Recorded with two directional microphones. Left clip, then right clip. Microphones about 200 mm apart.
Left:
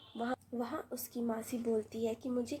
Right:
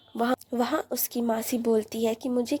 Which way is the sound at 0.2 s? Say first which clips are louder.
Right 12 dB; 45° right (ahead or behind).